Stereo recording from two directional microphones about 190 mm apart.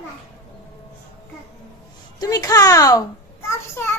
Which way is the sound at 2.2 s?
20° left (ahead or behind).